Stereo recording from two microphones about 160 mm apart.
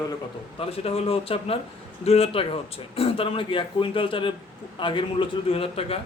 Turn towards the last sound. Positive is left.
turn(degrees=35)  # may be behind; listen again after turning